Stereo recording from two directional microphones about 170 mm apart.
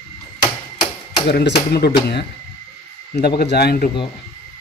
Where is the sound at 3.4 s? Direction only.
70° left (ahead or behind).